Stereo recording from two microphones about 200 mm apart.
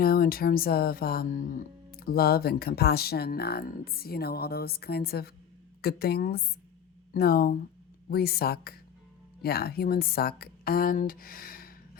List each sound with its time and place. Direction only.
0.0 s music: 50° left (ahead or behind)